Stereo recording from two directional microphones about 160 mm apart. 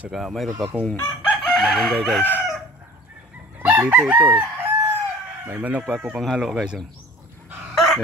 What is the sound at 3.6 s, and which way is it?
Chicken, 10° right (ahead or behind).